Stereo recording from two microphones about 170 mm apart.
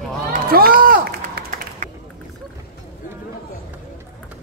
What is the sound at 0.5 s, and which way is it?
Run, 60° right (ahead or behind).